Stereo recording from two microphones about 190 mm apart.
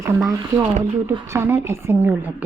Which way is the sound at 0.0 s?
15° right (ahead or behind).